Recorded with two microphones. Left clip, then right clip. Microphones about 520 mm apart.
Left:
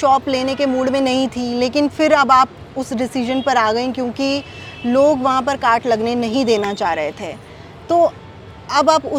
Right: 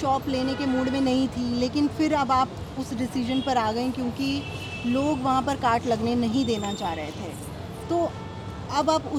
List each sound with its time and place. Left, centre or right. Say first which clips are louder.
0.0 s speech: left 10 dB; left